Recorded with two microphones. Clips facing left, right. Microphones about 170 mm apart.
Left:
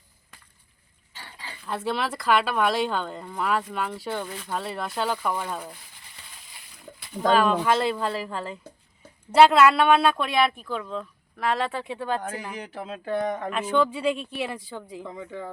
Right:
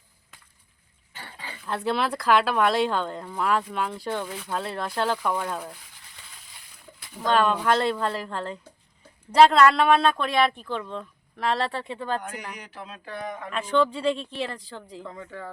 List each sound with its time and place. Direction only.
1.6 s speech: centre (ahead or behind)
7.3 s speech: 5° left (ahead or behind)
13.2 s speech: 45° left (ahead or behind)
13.5 s speech: 5° left (ahead or behind)